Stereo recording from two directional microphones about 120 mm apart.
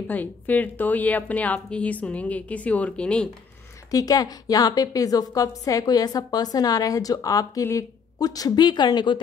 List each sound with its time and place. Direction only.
0.1 s a woman's voice: 15° left (ahead or behind)
3.9 s a woman's voice: 30° left (ahead or behind)